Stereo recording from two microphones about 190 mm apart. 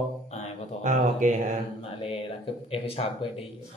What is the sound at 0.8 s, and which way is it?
Speech, 40° right (ahead or behind).